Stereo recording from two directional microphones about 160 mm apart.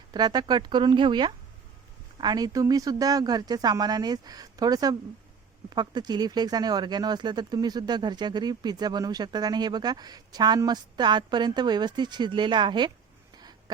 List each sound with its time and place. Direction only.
0.1 s speech: 25° right (ahead or behind)